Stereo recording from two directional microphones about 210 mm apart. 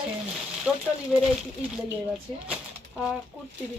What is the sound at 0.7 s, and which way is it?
Speech, 5° right (ahead or behind).